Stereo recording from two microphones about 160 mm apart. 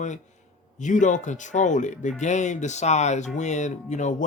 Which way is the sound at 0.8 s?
50° left (ahead or behind).